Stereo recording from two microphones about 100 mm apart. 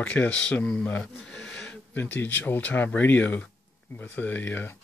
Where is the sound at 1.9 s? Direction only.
20° left (ahead or behind).